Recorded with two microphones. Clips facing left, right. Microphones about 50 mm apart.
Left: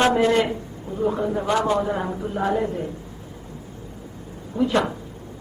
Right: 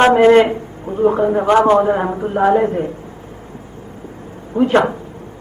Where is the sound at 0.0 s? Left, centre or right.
Right.